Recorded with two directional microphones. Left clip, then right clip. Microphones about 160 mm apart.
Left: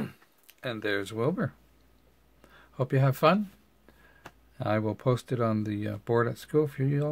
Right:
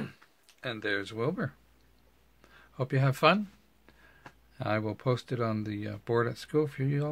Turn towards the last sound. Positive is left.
turn(degrees=10)  # may be behind; listen again after turning